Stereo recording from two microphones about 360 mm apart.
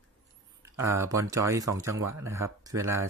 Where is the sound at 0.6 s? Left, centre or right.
Centre.